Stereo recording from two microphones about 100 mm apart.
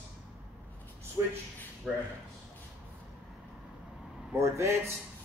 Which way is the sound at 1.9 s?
10° right (ahead or behind).